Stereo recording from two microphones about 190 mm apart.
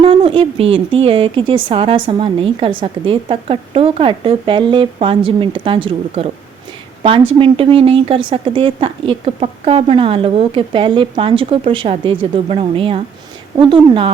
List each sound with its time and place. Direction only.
0.0 s a woman's voice: 30° right (ahead or behind)